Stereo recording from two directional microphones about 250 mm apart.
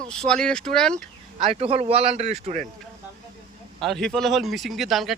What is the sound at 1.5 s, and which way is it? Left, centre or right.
Speech, right.